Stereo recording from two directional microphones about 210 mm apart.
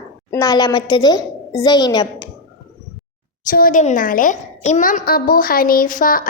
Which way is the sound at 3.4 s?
40° left (ahead or behind).